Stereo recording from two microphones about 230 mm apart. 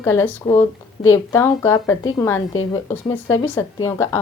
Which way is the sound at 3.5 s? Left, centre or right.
Centre.